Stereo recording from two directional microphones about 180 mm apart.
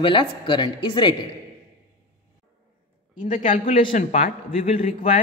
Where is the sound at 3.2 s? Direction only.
45° left (ahead or behind).